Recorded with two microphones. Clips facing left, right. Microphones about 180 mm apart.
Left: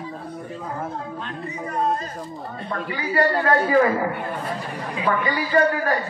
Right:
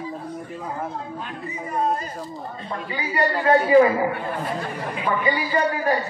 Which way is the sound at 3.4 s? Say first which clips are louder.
Right 6 dB; 20° right (ahead or behind).